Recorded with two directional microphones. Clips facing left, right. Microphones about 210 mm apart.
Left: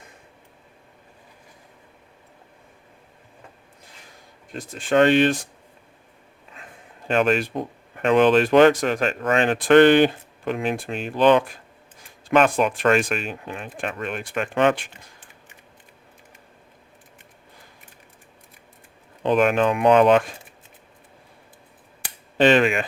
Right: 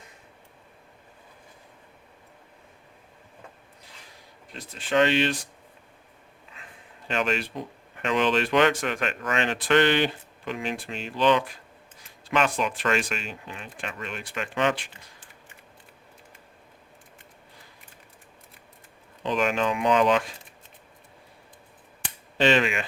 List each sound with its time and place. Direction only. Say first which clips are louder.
4.5 s speech: left 5 dB; 50° left (ahead or behind)
7.1 s speech: left 7 dB; 50° left (ahead or behind)
9.2 s speech: left 8 dB; 50° left (ahead or behind)
19.2 s speech: left 6 dB; 55° left (ahead or behind)
22.4 s speech: left 5 dB; 55° left (ahead or behind)